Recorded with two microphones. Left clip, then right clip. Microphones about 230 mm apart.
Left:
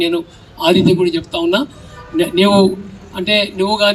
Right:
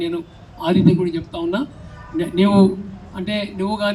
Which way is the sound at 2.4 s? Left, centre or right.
Left.